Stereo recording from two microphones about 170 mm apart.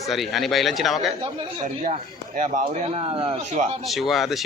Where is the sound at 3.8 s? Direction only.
Centre (ahead or behind).